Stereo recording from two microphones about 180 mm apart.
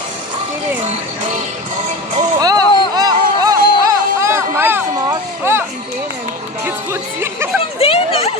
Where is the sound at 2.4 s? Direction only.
20° right (ahead or behind).